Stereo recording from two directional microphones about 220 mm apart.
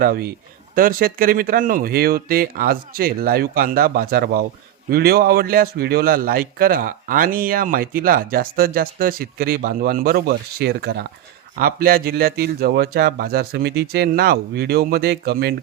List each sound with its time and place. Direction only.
0.0 s a man's voice: 45° right (ahead or behind)